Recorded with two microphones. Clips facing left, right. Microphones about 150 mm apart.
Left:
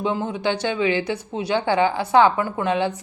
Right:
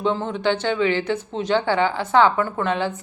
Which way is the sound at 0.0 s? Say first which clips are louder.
Right 1 dB; 10° left (ahead or behind).